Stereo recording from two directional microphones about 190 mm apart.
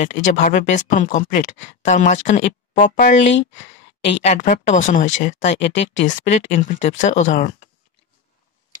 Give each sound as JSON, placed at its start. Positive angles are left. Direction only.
{"t": 0.0, "sound": "speech", "side_deg": 40}